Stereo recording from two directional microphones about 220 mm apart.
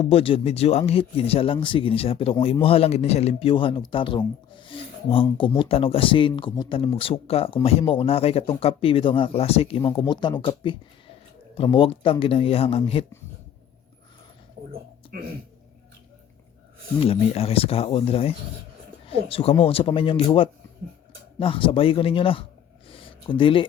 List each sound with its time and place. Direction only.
0.0 s speech: 25° left (ahead or behind)
17.0 s speech: 25° left (ahead or behind)
22.9 s a sound: 25° left (ahead or behind)